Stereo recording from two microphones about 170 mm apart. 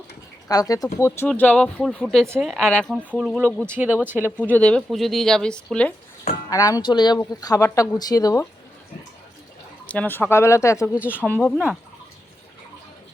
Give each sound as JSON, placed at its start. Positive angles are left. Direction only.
{"t": 0.4, "sound": "speech", "side_deg": 20}
{"t": 2.2, "sound": "speech", "side_deg": -15}
{"t": 2.5, "sound": "speech", "side_deg": 5}
{"t": 4.3, "sound": "speech", "side_deg": 10}
{"t": 6.5, "sound": "speech", "side_deg": 20}
{"t": 9.8, "sound": "speech", "side_deg": 10}
{"t": 11.3, "sound": "speech", "side_deg": 0}